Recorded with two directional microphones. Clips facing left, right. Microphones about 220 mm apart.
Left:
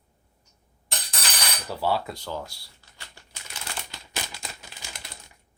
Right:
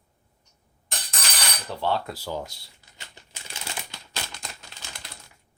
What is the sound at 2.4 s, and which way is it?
Typewriter, 20° right (ahead or behind).